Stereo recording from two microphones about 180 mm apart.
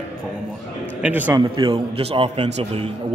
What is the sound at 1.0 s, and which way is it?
Speech, 10° right (ahead or behind).